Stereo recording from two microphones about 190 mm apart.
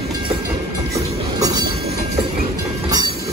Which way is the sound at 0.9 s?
20° right (ahead or behind).